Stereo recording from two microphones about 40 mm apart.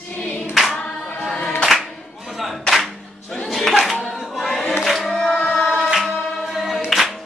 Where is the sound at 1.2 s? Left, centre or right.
Left.